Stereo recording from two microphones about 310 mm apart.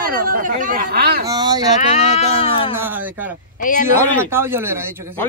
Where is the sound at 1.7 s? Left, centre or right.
Left.